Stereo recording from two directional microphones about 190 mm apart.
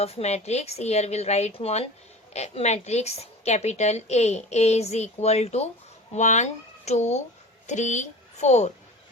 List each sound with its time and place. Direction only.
0.0 s a woman's voice: 35° left (ahead or behind)